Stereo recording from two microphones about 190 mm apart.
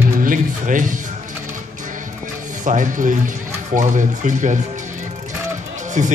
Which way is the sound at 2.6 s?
40° right (ahead or behind).